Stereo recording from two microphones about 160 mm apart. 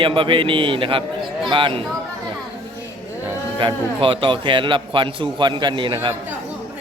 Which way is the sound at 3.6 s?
35° right (ahead or behind).